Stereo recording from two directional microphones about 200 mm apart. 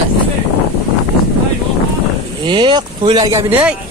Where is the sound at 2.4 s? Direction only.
25° right (ahead or behind).